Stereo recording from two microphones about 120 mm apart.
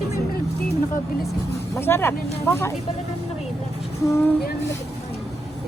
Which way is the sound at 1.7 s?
20° left (ahead or behind).